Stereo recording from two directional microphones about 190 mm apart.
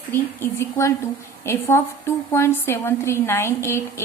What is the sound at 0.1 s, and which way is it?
A woman's voice, 10° left (ahead or behind).